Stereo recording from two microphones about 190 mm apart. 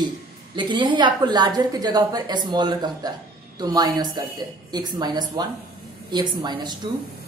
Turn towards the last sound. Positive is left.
turn(degrees=-25)  # may be behind; listen again after turning